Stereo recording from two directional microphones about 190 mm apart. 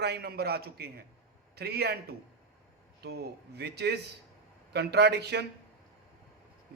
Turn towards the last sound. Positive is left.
turn(degrees=-60)  # may be behind; listen again after turning